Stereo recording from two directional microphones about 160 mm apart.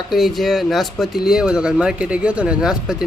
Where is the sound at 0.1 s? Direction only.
Centre (ahead or behind).